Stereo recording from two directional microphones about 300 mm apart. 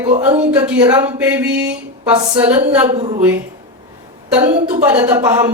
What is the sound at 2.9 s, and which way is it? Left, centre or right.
Speech, centre.